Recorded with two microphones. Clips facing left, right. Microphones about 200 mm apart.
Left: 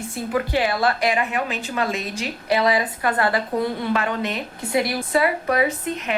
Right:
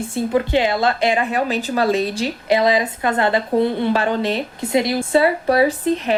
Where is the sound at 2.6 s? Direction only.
20° right (ahead or behind).